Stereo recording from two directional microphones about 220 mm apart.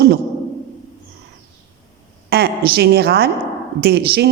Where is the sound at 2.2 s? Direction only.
45° right (ahead or behind).